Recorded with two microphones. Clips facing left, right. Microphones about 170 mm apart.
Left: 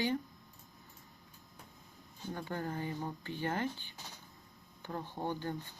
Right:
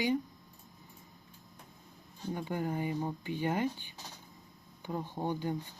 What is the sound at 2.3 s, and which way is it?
Speech, 15° right (ahead or behind).